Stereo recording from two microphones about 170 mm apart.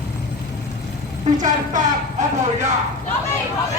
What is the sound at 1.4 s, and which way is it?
Speech, 45° right (ahead or behind).